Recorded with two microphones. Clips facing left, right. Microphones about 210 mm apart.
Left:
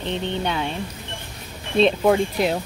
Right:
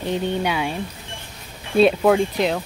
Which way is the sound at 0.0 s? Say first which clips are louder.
Right 3 dB; 10° right (ahead or behind).